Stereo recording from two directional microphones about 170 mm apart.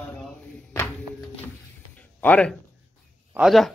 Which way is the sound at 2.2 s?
5° left (ahead or behind).